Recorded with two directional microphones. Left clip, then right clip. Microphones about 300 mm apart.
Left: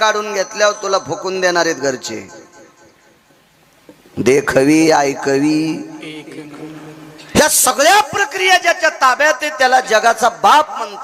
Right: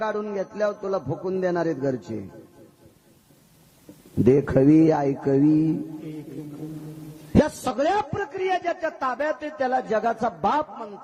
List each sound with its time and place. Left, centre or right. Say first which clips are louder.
0.0 s a man's voice: left 12 dB; centre
1.3 s a man's voice: left 10 dB; centre
4.2 s a man's voice: left 7 dB; centre
7.3 s a man's voice: left 10 dB; centre